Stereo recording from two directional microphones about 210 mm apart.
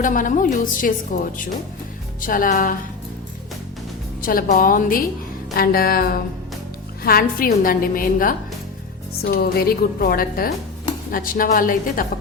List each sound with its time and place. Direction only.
0.0 s a woman's voice: 40° left (ahead or behind)
4.2 s a woman's voice: 40° left (ahead or behind)